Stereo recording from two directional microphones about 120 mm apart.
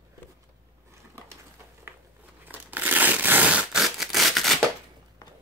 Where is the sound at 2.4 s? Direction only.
15° right (ahead or behind); by 4.5 s centre (ahead or behind).